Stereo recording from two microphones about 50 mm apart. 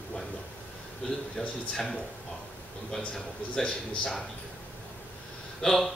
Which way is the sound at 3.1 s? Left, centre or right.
Centre.